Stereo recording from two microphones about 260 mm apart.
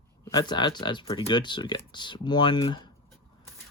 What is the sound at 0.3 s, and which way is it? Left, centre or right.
Speech, centre.